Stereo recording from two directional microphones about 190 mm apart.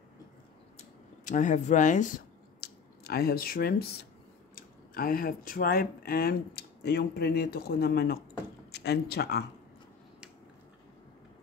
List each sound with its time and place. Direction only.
0.7 s speech: 45° left (ahead or behind)
2.6 s squish: 55° left (ahead or behind)
4.6 s speech: 50° left (ahead or behind)